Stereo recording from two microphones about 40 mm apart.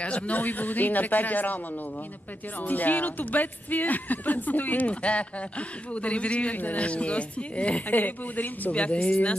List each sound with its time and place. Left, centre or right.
0.0 s speech: left
0.4 s speech: left
2.6 s speech: left
5.0 s speech: left
7.9 s speech: left
8.7 s speech: left